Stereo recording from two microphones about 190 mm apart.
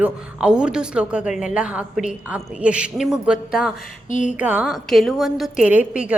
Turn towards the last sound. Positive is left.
turn(degrees=-5)  # may be behind; listen again after turning